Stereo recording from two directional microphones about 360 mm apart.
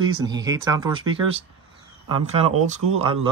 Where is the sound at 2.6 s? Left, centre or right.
Centre.